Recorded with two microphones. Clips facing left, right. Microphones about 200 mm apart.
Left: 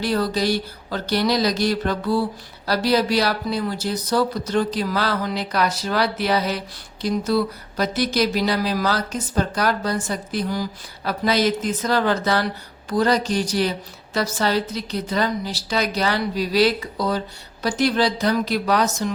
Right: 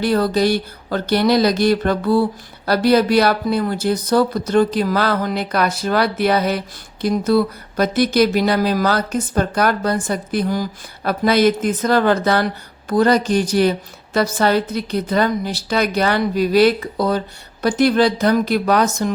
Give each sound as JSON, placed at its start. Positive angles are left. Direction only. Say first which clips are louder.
{"t": 0.0, "sound": "speech", "louder": "right 5 dB", "side_deg": -55}